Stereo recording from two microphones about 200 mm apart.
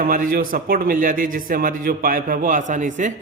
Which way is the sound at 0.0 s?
45° right (ahead or behind).